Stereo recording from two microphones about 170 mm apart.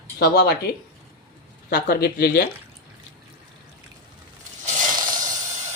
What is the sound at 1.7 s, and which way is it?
Speech, 65° left (ahead or behind).